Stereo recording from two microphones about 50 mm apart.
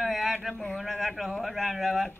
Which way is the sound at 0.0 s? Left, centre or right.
Centre.